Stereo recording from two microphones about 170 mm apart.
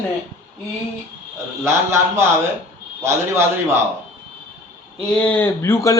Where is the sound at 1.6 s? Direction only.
15° right (ahead or behind).